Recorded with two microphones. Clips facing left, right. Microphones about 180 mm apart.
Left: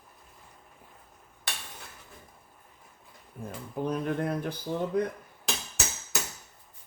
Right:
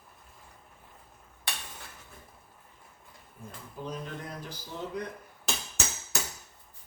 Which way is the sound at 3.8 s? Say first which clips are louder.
Left 9 dB; 60° left (ahead or behind).